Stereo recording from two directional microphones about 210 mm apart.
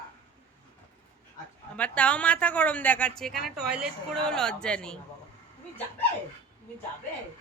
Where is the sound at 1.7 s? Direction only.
5° left (ahead or behind).